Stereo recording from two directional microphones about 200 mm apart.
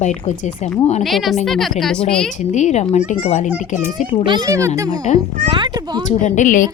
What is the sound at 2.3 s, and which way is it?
A woman's voice, 35° left (ahead or behind).